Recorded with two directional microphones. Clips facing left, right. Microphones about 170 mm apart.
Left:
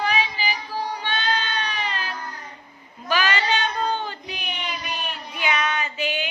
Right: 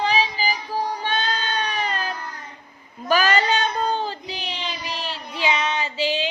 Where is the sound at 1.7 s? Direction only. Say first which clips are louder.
Right 3 dB; 45° right (ahead or behind).